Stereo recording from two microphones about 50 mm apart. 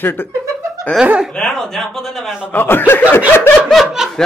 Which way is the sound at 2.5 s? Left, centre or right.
Left.